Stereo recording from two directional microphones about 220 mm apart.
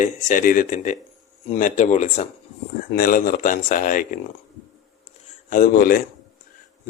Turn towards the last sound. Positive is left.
turn(degrees=40)  # may be behind; listen again after turning